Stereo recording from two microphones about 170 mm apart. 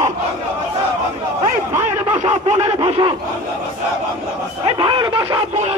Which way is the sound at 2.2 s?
40° right (ahead or behind).